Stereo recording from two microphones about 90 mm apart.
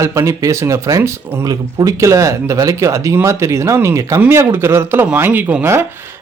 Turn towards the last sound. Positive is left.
turn(degrees=-25)  # may be behind; listen again after turning